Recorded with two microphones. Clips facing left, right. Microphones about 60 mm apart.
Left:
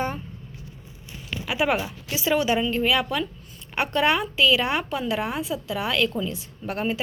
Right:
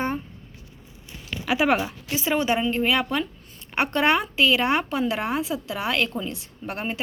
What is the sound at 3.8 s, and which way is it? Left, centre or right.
A woman's voice, right.